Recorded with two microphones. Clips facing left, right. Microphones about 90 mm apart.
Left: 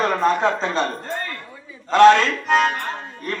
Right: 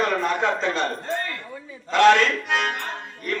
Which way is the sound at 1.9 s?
35° left (ahead or behind).